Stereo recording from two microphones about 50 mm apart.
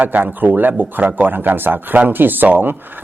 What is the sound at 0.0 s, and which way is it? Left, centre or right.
A man's voice, right.